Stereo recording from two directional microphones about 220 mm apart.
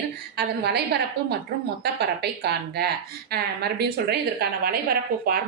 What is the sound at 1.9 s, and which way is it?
A woman's voice, 50° right (ahead or behind).